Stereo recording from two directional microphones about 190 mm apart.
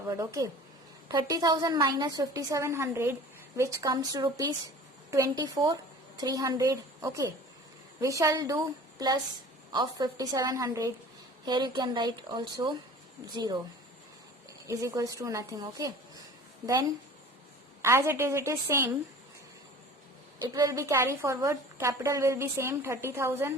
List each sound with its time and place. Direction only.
0.1 s a woman's voice: 15° right (ahead or behind)
14.7 s a woman's voice: 15° right (ahead or behind)
20.4 s a woman's voice: 20° right (ahead or behind)